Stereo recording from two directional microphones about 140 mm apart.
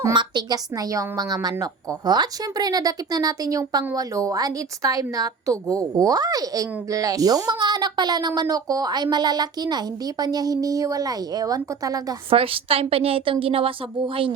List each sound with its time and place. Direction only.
0.0 s a woman's voice: 30° right (ahead or behind)
12.3 s a woman's voice: 40° right (ahead or behind)